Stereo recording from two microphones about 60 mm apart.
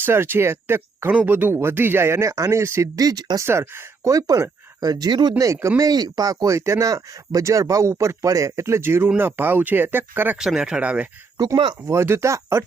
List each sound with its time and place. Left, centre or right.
0.0 s speech: right
1.1 s speech: right
1.5 s speech: right
2.3 s speech: right
2.8 s speech: right
3.4 s speech: right
4.1 s speech: right
5.4 s speech: right
5.9 s speech: right
10.3 s speech: centre
11.9 s speech: right